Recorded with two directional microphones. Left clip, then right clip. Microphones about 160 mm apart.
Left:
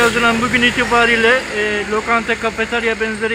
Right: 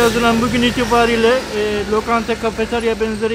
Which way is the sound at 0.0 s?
15° right (ahead or behind).